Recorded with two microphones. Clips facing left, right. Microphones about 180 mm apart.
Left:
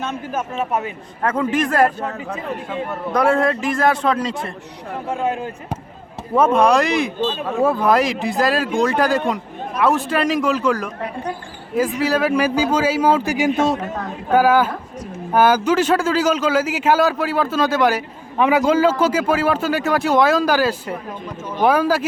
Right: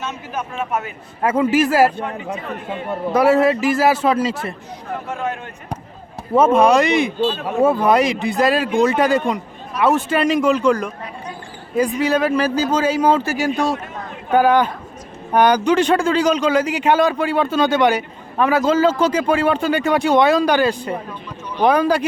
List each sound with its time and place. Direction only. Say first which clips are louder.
0.0 s a man's voice: left 2 dB; 55° left (ahead or behind)
0.5 s speech: left 1 dB; 35° left (ahead or behind)
1.2 s a man's voice: right 3 dB; 10° right (ahead or behind)
2.3 s speech: left 1 dB; 25° right (ahead or behind)
3.1 s a man's voice: right 3 dB; 5° right (ahead or behind)
5.2 s speech: left 5 dB; 30° left (ahead or behind)
6.3 s a man's voice: right 2 dB; centre (ahead or behind)
11.0 s a woman's voice: left 5 dB; 60° left (ahead or behind)
12.0 s speech: even; 5° left (ahead or behind)
14.3 s a man's voice: even; 5° left (ahead or behind)
18.3 s a man's voice: even; 15° left (ahead or behind)